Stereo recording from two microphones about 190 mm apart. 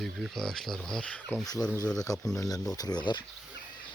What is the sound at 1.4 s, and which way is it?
Speech, 20° left (ahead or behind).